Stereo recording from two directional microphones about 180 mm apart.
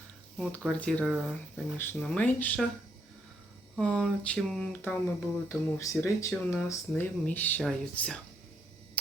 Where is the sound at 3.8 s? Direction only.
Centre (ahead or behind).